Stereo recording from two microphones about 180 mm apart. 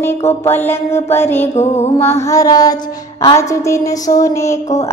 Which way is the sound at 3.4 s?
15° left (ahead or behind).